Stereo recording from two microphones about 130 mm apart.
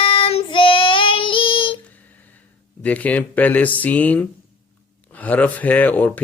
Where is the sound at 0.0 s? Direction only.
45° left (ahead or behind).